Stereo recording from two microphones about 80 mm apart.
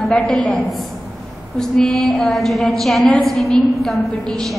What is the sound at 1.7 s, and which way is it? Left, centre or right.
A woman's voice, centre.